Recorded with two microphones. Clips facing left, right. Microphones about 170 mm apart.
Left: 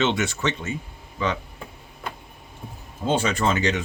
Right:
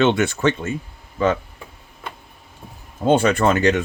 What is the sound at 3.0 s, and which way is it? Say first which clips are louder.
Speech: right 6 dB; 55° right (ahead or behind).